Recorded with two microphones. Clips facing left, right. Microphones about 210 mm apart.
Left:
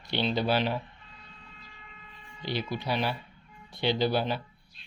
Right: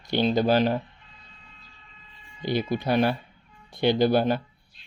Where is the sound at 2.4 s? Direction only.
50° right (ahead or behind).